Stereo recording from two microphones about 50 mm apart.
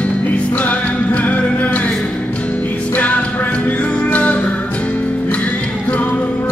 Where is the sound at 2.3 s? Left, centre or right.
Left.